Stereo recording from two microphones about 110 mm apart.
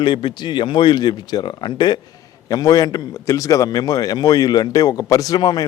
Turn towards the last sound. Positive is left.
turn(degrees=40)  # may be behind; listen again after turning